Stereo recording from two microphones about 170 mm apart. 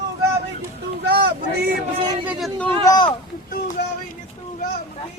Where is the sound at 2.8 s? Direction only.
25° left (ahead or behind).